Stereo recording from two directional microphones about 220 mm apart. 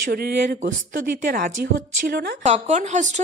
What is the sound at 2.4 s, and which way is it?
Speech, 30° right (ahead or behind).